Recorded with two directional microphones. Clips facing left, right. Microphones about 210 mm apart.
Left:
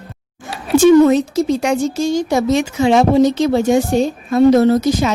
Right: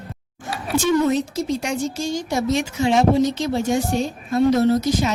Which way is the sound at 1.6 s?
75° left (ahead or behind).